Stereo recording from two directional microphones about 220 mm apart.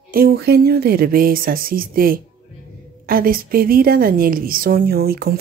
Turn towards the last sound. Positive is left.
turn(degrees=-45)  # may be behind; listen again after turning